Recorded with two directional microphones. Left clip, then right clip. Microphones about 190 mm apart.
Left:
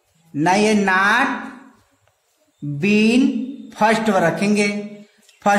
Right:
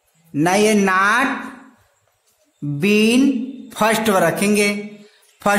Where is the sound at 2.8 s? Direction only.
30° right (ahead or behind).